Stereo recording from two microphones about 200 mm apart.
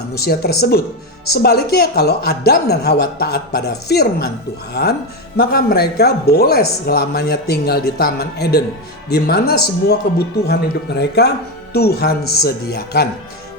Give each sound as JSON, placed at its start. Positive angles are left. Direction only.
{"t": 0.1, "sound": "speech", "side_deg": 50}